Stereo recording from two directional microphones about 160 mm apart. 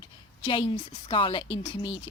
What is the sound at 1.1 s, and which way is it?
Speech, 35° left (ahead or behind).